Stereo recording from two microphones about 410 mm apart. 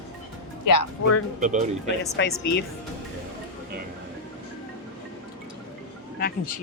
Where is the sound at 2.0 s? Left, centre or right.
Left.